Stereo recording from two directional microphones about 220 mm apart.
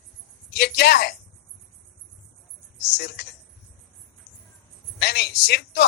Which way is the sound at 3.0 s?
45° left (ahead or behind).